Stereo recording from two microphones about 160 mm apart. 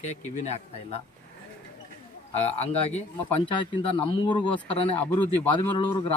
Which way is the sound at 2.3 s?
40° left (ahead or behind).